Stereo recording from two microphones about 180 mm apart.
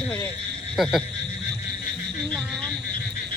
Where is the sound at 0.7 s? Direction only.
Centre (ahead or behind).